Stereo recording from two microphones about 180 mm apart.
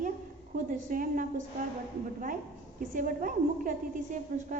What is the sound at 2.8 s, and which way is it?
A woman's voice, 50° right (ahead or behind).